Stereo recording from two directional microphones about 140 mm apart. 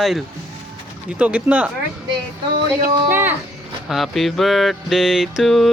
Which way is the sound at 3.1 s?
15° right (ahead or behind).